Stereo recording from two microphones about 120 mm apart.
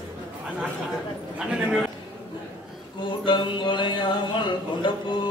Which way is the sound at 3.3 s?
40° left (ahead or behind).